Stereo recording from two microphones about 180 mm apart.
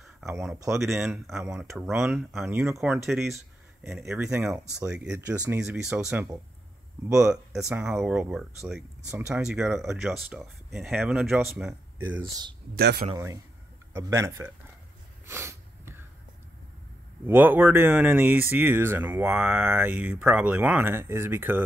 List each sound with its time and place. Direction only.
0.7 s speech: centre (ahead or behind)
7.2 s speech: 5° right (ahead or behind)
12.7 s speech: 60° right (ahead or behind)
13.1 s a man's voice: 20° right (ahead or behind)
15.2 s snort: 15° right (ahead or behind)
17.3 s speech: 10° right (ahead or behind)